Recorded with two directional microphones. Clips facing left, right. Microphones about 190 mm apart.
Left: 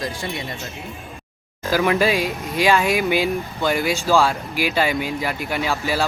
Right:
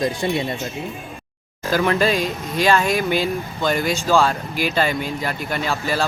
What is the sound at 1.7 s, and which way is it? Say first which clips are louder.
Speech: even; 10° left (ahead or behind).